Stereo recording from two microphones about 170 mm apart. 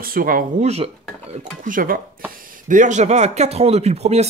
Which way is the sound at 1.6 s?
55° right (ahead or behind).